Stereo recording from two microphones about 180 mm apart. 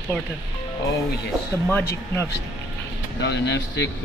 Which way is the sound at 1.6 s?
10° left (ahead or behind).